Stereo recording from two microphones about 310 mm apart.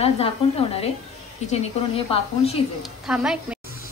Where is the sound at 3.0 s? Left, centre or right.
Centre.